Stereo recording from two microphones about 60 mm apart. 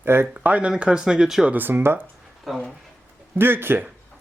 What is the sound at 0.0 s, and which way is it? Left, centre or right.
Speech, right.